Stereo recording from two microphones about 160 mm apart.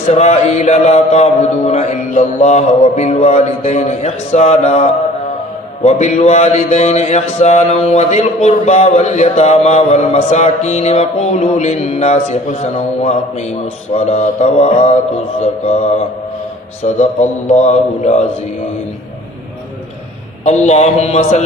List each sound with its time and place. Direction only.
0.1 s speech: 45° left (ahead or behind)
15.6 s mantra: 40° left (ahead or behind)
16.8 s speech: 45° left (ahead or behind)
20.4 s speech: 45° left (ahead or behind)